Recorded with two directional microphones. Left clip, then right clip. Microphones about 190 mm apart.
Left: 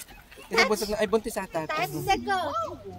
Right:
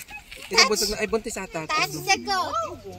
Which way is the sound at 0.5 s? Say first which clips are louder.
Right 3 dB; 55° left (ahead or behind).